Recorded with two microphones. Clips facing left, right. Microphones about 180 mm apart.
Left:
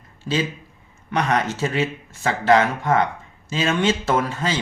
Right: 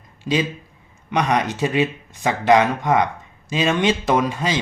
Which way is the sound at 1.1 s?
15° right (ahead or behind).